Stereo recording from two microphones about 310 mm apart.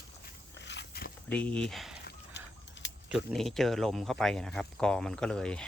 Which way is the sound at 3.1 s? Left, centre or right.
Centre.